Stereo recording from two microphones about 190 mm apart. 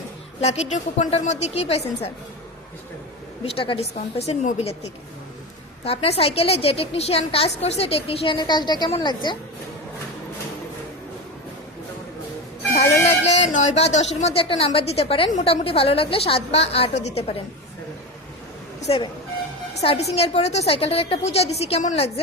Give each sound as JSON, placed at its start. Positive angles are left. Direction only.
{"t": 0.4, "sound": "a woman's voice", "side_deg": 35}
{"t": 3.4, "sound": "a woman's voice", "side_deg": 30}
{"t": 5.8, "sound": "a woman's voice", "side_deg": 30}
{"t": 12.8, "sound": "a woman's voice", "side_deg": 35}
{"t": 19.7, "sound": "a woman's voice", "side_deg": 35}